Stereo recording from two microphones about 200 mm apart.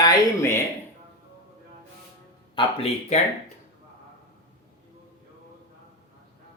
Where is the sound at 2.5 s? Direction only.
30° left (ahead or behind).